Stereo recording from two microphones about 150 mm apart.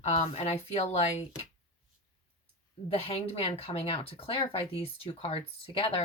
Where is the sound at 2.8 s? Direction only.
40° left (ahead or behind).